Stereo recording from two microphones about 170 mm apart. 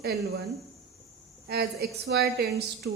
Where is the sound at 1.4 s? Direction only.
65° right (ahead or behind).